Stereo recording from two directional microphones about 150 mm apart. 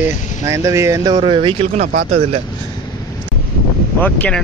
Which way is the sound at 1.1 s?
35° right (ahead or behind).